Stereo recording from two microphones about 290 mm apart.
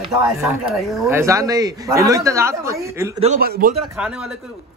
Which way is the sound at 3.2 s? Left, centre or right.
Right.